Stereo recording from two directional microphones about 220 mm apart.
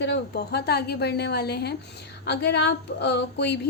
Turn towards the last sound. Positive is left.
turn(degrees=50)  # may be behind; listen again after turning